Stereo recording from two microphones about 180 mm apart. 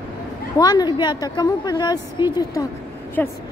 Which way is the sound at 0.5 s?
20° left (ahead or behind).